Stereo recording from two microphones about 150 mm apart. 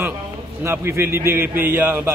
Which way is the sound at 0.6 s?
15° right (ahead or behind).